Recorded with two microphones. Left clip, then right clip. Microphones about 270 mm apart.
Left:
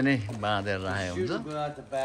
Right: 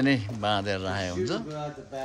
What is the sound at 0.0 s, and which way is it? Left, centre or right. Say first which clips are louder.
Speech: right 2 dB; centre.